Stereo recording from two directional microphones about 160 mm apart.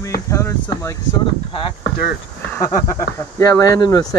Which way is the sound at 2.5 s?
20° left (ahead or behind).